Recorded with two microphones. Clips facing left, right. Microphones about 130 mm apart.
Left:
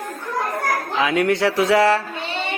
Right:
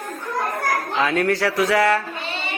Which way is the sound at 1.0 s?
15° left (ahead or behind).